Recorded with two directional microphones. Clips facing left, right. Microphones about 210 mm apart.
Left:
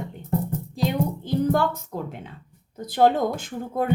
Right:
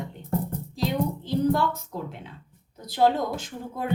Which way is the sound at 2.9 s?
55° left (ahead or behind).